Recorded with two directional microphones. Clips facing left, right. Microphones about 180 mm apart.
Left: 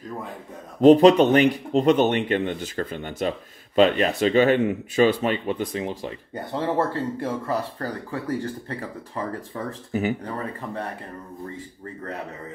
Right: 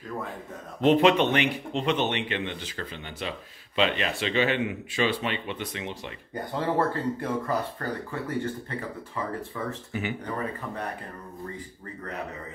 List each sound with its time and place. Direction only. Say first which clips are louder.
0.7 s a man's voice: left 7 dB; 40° left (ahead or behind)
6.5 s speech: left 2 dB; 25° left (ahead or behind)